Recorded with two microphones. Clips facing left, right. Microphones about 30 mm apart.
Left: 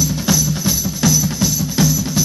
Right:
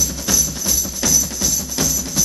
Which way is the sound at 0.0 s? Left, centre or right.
Centre.